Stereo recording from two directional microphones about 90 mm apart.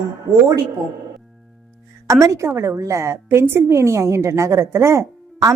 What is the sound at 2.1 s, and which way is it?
A woman's voice, 35° right (ahead or behind).